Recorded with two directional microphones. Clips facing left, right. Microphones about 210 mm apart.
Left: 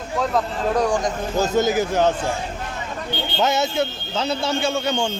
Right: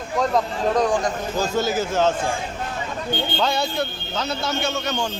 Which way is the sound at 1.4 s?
20° left (ahead or behind).